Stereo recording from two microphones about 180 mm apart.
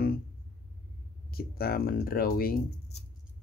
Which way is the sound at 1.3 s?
60° left (ahead or behind).